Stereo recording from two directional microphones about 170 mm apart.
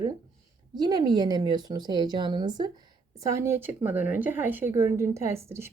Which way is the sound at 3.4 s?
15° right (ahead or behind).